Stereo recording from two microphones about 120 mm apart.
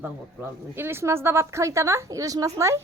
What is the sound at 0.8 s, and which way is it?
A woman's voice, 20° right (ahead or behind).